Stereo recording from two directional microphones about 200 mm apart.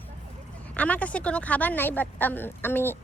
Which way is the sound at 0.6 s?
5° left (ahead or behind).